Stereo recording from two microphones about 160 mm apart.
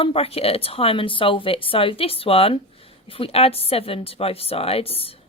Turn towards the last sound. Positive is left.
turn(degrees=35)  # may be behind; listen again after turning